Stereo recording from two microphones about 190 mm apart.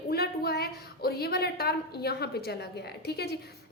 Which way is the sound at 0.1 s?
55° left (ahead or behind).